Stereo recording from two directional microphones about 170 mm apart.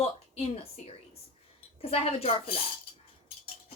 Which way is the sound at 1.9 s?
35° left (ahead or behind).